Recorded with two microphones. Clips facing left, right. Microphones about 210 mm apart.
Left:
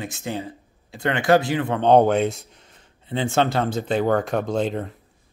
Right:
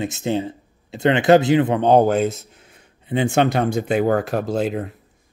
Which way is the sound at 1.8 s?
5° right (ahead or behind).